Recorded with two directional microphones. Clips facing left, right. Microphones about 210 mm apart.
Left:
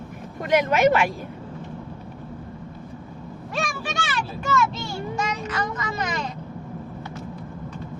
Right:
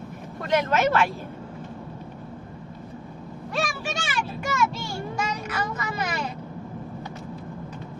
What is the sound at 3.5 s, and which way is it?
Vehicle, 5° right (ahead or behind).